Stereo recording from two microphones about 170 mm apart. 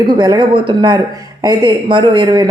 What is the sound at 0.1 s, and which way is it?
Speech, 25° right (ahead or behind).